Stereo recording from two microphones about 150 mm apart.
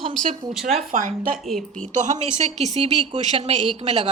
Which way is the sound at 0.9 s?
60° right (ahead or behind).